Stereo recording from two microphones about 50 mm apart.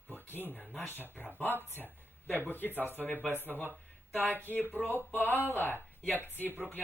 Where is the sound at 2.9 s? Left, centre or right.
Left.